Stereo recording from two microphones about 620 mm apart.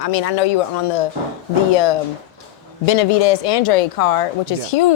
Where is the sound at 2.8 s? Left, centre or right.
Left.